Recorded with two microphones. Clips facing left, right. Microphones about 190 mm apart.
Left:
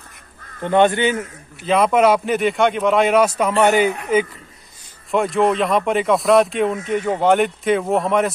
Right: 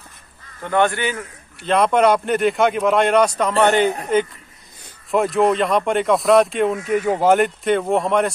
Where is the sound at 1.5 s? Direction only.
Centre (ahead or behind).